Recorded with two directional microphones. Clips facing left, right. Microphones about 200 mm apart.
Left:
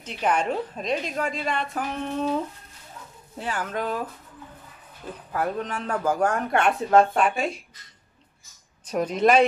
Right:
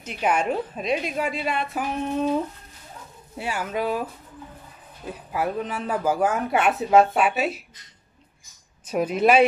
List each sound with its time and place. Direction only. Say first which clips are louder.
0.0 s speech: right 1 dB; 10° right (ahead or behind)
3.3 s speech: right 2 dB; 10° right (ahead or behind)
5.0 s speech: right 1 dB; 10° right (ahead or behind)
8.8 s speech: right 1 dB; 5° right (ahead or behind)